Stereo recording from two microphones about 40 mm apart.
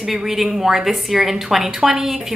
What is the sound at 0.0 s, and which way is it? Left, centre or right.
A woman's voice, centre.